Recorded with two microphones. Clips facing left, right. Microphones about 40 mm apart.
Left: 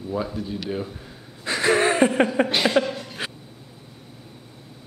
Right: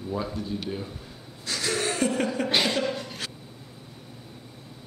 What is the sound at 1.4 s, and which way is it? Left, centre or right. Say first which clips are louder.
Gasp: left 9 dB; left.